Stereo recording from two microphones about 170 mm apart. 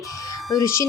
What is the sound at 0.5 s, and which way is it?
Speech, 15° left (ahead or behind).